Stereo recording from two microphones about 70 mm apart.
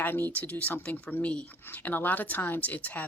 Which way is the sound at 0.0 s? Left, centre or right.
Left.